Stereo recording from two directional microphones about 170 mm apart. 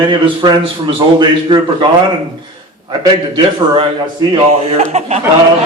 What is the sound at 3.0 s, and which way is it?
Speech, 25° right (ahead or behind).